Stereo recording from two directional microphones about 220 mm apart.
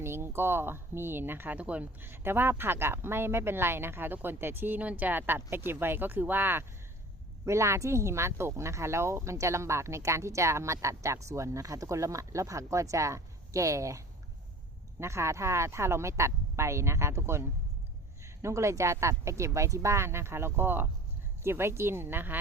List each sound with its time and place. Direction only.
0.0 s speech: 10° right (ahead or behind)
15.0 s speech: 10° right (ahead or behind)
18.4 s speech: 15° right (ahead or behind)